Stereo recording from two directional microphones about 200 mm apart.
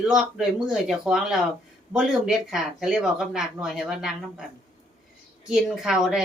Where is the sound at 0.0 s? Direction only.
5° right (ahead or behind).